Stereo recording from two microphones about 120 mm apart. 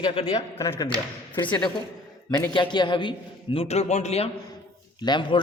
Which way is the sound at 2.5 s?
40° left (ahead or behind).